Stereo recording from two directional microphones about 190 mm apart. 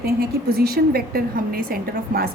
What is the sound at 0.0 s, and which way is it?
A woman's voice, 55° right (ahead or behind).